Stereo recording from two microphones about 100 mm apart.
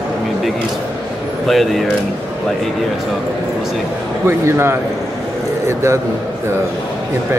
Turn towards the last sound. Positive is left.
turn(degrees=-30)  # may be behind; listen again after turning